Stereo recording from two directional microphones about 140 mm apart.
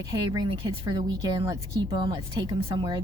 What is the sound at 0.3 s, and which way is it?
A woman's voice, 35° right (ahead or behind).